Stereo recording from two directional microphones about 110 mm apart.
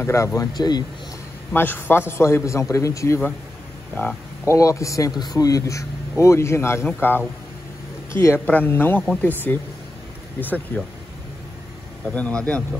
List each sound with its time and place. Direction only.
0.0 s speech: 25° left (ahead or behind)
1.5 s speech: 20° left (ahead or behind)
4.5 s a man's voice: 30° left (ahead or behind)
12.1 s a man's voice: 10° left (ahead or behind)